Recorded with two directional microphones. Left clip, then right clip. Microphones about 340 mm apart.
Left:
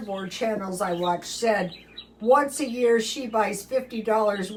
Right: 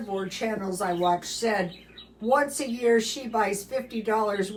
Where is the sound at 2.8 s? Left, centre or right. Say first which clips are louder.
Left 1 dB; centre.